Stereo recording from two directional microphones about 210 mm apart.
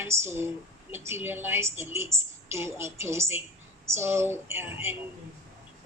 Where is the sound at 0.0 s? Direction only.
10° right (ahead or behind).